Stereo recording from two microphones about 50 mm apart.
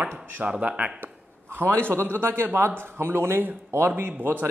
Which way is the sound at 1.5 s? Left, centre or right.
Right.